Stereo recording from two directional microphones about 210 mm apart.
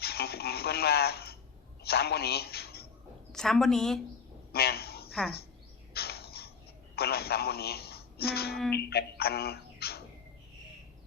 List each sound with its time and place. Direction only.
0.0 s a man's voice: 50° left (ahead or behind)
3.3 s a woman's voice: centre (ahead or behind)
4.5 s a sound: 50° left (ahead or behind)
6.9 s speech: 50° left (ahead or behind)
8.5 s a woman's voice: centre (ahead or behind)
8.9 s speech: 50° left (ahead or behind)